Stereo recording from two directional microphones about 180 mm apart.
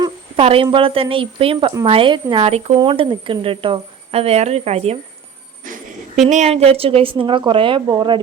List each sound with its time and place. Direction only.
0.0 s speech: 30° right (ahead or behind)
5.7 s a sound: 50° right (ahead or behind)
6.2 s speech: 35° right (ahead or behind)